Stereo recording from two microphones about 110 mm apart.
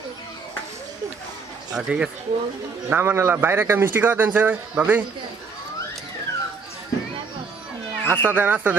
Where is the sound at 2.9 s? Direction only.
20° right (ahead or behind).